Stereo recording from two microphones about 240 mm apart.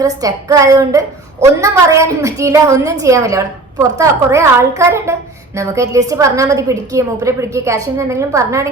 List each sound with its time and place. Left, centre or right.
0.0 s a woman's voice: centre